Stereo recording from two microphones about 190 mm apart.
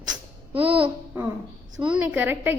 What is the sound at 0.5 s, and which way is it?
Speech, 30° right (ahead or behind).